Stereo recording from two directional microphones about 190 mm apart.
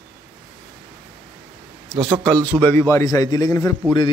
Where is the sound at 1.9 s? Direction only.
25° right (ahead or behind).